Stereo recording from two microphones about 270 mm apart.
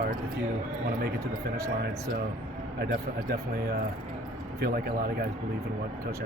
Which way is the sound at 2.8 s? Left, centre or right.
Right.